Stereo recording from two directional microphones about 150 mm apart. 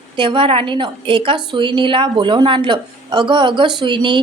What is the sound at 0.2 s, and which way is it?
A woman's voice, 35° right (ahead or behind).